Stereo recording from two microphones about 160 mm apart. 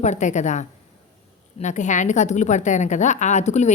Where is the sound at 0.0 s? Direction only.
50° left (ahead or behind).